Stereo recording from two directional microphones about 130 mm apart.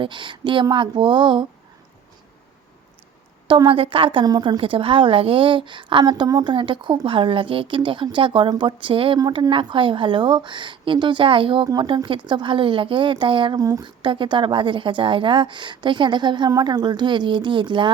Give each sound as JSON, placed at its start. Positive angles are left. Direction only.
{"t": 0.0, "sound": "a woman's voice", "side_deg": -40}
{"t": 3.4, "sound": "a woman's voice", "side_deg": -40}
{"t": 9.1, "sound": "a woman's voice", "side_deg": -30}
{"t": 13.6, "sound": "speech", "side_deg": -25}
{"t": 13.8, "sound": "a woman's voice", "side_deg": -40}